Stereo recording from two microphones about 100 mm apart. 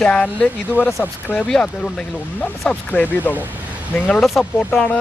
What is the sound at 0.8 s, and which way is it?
Speech, 15° right (ahead or behind).